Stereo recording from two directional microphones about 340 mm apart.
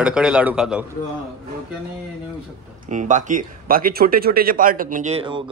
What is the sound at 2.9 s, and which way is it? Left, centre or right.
Speech, right.